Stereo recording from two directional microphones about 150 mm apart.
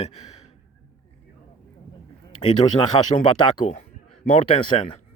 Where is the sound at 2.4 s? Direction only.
35° left (ahead or behind).